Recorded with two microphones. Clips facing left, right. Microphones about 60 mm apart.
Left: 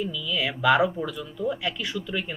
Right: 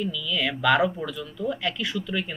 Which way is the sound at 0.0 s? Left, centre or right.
Centre.